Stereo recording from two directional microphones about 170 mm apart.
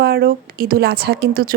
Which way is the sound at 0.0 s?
65° right (ahead or behind).